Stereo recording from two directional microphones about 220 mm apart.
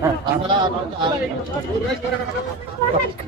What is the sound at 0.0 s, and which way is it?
A man's voice, 20° right (ahead or behind).